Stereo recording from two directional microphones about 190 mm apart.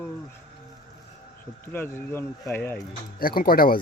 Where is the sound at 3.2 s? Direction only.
50° left (ahead or behind).